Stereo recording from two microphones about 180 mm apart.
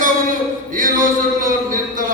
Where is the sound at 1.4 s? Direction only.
50° right (ahead or behind).